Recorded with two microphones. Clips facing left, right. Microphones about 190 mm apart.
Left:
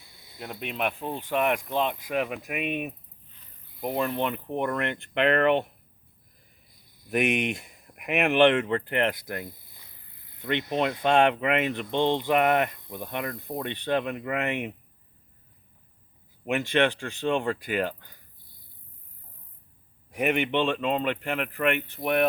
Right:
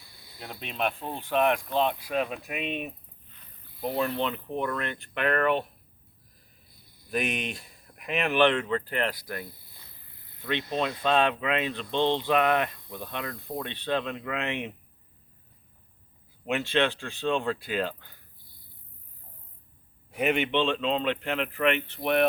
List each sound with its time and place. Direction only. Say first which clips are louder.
0.0 s snake: left 3 dB; 20° left (ahead or behind)
0.6 s speech: left 1 dB; 15° left (ahead or behind)
5.1 s speech: left 3 dB; 65° left (ahead or behind)
7.3 s speech: left 6 dB; 20° left (ahead or behind)
8.1 s speech: left 4 dB; 65° left (ahead or behind)
8.7 s speech: left 3 dB; 20° left (ahead or behind)
14.3 s speech: left 3 dB; 50° left (ahead or behind)
16.5 s speech: left 2 dB; 15° left (ahead or behind)
20.4 s speech: left 1 dB; 15° left (ahead or behind)